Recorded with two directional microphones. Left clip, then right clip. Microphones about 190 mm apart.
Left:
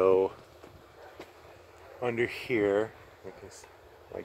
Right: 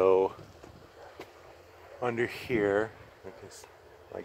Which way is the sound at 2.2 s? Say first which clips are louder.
Left 1 dB; 40° right (ahead or behind).